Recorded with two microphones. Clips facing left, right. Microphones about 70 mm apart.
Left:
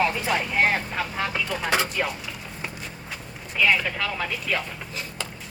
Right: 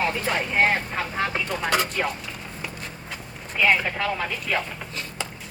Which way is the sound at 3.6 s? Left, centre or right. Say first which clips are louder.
Right 1 dB; right.